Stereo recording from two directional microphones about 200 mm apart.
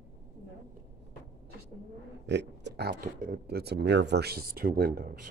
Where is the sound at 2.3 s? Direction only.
60° right (ahead or behind).